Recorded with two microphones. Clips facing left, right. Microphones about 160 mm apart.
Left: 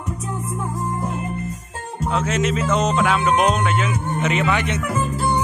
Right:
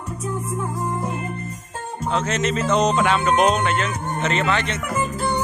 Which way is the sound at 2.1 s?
5° left (ahead or behind).